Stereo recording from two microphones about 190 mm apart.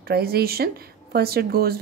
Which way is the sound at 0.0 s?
55° right (ahead or behind).